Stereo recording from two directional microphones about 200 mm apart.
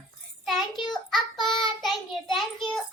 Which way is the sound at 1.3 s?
20° left (ahead or behind).